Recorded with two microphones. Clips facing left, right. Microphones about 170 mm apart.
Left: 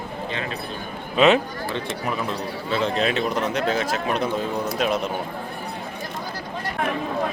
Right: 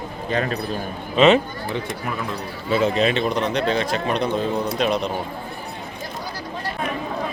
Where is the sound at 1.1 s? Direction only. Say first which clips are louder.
Right 2 dB; centre (ahead or behind).